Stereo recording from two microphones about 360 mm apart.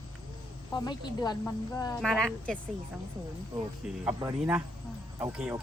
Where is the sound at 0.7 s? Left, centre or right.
Centre.